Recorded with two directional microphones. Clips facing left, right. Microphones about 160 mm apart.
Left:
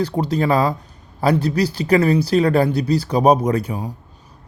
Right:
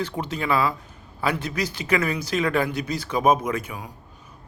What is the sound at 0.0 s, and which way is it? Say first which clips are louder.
A man's voice: left 8 dB; 35° left (ahead or behind).